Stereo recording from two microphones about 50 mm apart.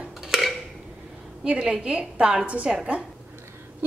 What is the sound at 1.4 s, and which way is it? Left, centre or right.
Speech, centre.